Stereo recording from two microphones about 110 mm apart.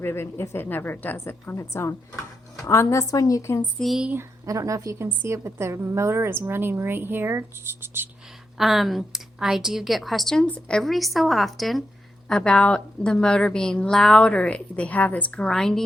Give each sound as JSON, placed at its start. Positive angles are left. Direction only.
{"t": 0.0, "sound": "a woman's voice", "side_deg": 20}
{"t": 3.8, "sound": "a woman's voice", "side_deg": 0}
{"t": 4.4, "sound": "speech", "side_deg": -30}
{"t": 8.5, "sound": "a woman's voice", "side_deg": 0}